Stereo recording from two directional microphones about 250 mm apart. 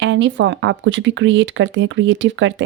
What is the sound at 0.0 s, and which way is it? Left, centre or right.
Speech, right.